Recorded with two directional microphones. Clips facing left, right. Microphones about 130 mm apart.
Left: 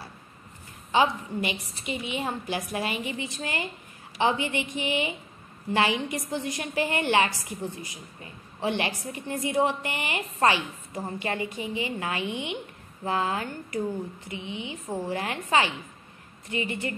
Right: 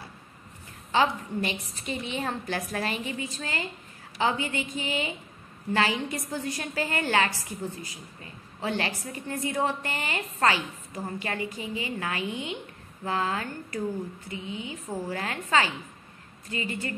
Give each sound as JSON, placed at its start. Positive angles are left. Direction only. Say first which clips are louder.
{"t": 0.9, "sound": "a woman's voice", "louder": "left 1 dB", "side_deg": 15}